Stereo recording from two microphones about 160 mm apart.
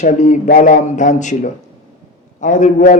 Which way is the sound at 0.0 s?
50° left (ahead or behind).